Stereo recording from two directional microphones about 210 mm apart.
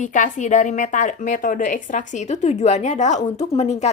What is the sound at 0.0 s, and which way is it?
A woman's voice, 35° left (ahead or behind).